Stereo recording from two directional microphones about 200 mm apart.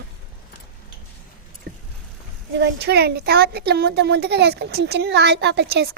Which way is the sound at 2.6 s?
55° right (ahead or behind).